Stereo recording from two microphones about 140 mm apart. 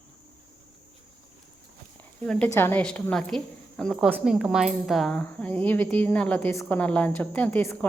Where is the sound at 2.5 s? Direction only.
15° left (ahead or behind).